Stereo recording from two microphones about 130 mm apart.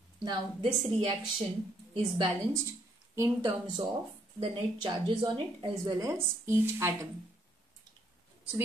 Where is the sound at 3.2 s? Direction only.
30° right (ahead or behind).